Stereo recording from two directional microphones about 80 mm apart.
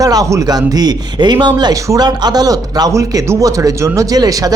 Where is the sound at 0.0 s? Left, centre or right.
Right.